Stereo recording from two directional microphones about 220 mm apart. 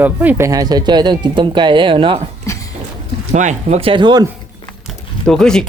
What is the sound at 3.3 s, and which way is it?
Speech, 35° right (ahead or behind).